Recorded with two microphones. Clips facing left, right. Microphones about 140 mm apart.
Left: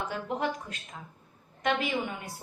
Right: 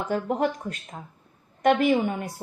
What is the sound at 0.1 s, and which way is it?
A woman's voice, 45° right (ahead or behind).